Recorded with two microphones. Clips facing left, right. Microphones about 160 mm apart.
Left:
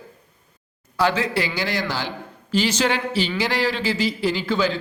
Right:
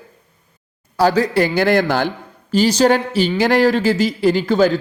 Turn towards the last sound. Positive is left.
turn(degrees=-45)  # may be behind; listen again after turning